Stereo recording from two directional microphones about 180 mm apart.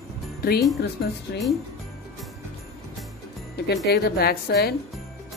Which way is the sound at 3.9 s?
60° left (ahead or behind).